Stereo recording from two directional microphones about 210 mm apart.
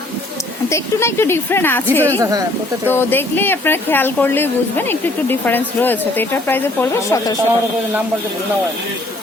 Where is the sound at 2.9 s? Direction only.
10° left (ahead or behind).